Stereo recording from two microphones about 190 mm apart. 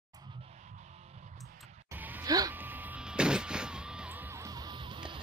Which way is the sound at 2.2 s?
20° right (ahead or behind).